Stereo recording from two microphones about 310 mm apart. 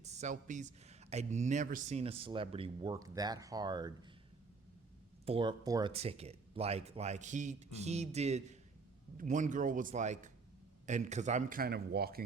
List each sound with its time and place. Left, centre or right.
0.0 s speech: right
5.2 s speech: centre